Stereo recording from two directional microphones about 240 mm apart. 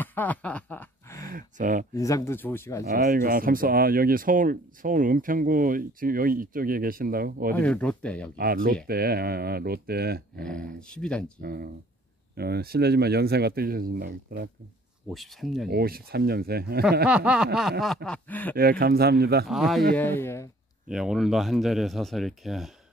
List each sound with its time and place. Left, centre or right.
0.0 s speech: centre
1.3 s speech: right
2.0 s speech: centre
2.9 s speech: right
7.5 s speech: centre
8.4 s speech: right
10.4 s speech: centre
11.4 s speech: right
15.0 s speech: centre
15.7 s speech: right
17.1 s speech: centre
18.6 s speech: right
19.4 s speech: centre
20.9 s speech: centre